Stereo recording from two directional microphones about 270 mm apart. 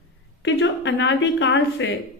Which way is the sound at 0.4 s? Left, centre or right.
Left.